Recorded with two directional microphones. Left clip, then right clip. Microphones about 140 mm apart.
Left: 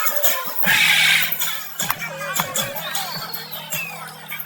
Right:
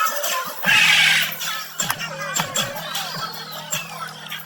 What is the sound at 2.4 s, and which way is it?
Music, 25° left (ahead or behind).